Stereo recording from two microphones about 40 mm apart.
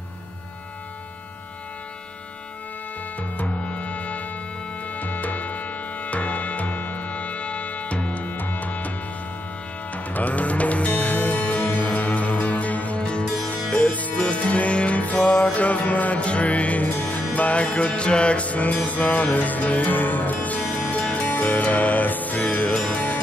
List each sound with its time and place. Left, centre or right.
3.4 s music: left
8.4 s music: left
9.9 s music: left